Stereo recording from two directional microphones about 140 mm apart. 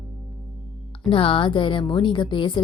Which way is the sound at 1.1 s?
40° left (ahead or behind).